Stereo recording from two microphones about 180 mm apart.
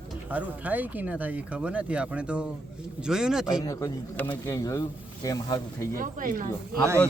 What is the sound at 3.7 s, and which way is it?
Speech, 20° left (ahead or behind).